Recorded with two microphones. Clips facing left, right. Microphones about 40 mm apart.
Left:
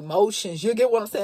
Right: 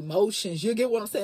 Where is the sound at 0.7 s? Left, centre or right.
Left.